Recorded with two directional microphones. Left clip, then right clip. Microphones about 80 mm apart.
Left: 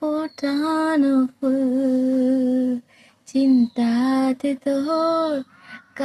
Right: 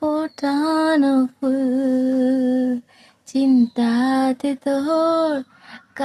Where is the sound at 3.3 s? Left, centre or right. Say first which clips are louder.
Right 1 dB; right.